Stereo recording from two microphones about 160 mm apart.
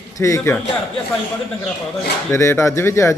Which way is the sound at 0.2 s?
20° left (ahead or behind).